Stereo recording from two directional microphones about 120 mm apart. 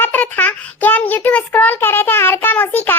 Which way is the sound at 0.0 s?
15° left (ahead or behind).